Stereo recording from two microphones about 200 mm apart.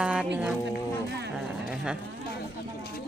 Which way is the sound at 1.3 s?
5° right (ahead or behind).